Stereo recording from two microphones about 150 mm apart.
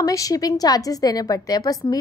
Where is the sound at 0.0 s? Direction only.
25° left (ahead or behind).